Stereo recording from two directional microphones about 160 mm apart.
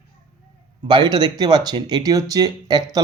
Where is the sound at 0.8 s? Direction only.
30° right (ahead or behind).